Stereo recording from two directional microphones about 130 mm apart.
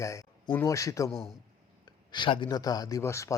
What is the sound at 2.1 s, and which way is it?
Speech, 40° left (ahead or behind).